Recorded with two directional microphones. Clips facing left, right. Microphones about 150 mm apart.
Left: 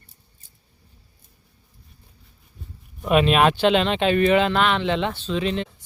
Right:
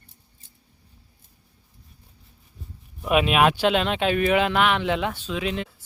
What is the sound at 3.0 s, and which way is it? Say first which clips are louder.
Speech: left 2 dB; 5° right (ahead or behind).